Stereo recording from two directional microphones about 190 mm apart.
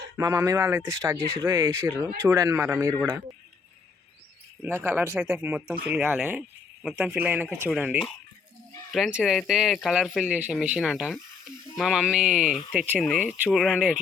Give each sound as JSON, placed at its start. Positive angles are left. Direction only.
{"t": 0.2, "sound": "speech", "side_deg": -15}
{"t": 4.6, "sound": "speech", "side_deg": -10}